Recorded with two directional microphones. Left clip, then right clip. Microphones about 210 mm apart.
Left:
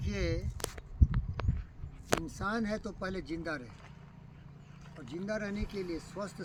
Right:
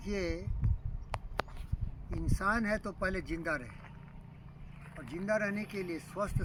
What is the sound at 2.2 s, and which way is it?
Speech, 5° left (ahead or behind).